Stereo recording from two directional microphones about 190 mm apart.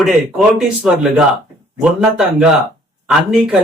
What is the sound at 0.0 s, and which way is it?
Speech, centre (ahead or behind).